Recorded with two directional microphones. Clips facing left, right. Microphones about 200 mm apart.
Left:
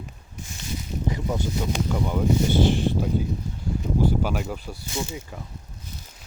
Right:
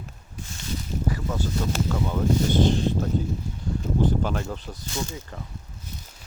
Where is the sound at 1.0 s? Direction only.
15° left (ahead or behind).